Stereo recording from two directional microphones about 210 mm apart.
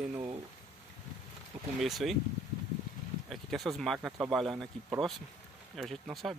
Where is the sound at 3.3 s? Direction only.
Centre (ahead or behind).